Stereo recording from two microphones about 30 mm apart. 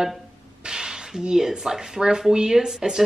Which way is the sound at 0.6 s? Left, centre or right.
Right.